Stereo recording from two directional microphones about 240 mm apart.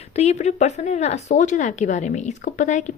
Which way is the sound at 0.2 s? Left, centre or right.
Left.